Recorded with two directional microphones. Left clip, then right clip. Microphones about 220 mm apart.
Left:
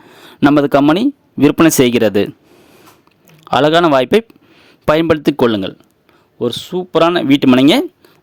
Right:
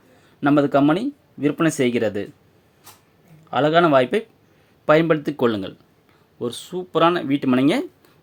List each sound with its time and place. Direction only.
0.1 s speech: 50° left (ahead or behind)
3.5 s speech: 55° left (ahead or behind)